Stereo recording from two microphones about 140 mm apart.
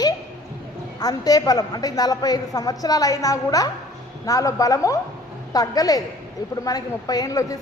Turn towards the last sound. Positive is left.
turn(degrees=25)  # may be behind; listen again after turning